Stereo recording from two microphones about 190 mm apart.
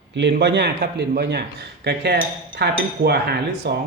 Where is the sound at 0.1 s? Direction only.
65° right (ahead or behind).